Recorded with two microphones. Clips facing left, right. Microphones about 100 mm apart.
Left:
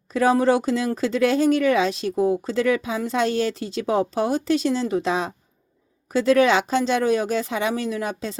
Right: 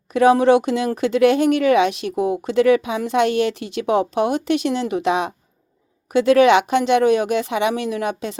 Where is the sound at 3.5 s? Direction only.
70° right (ahead or behind).